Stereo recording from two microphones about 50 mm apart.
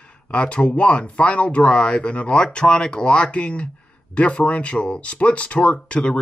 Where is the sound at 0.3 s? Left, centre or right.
Left.